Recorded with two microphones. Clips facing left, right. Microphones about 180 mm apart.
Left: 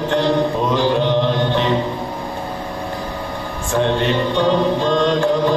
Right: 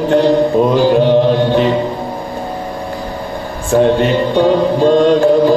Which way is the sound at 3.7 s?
40° right (ahead or behind).